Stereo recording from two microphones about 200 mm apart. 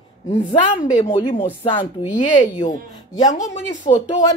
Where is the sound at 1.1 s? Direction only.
25° left (ahead or behind).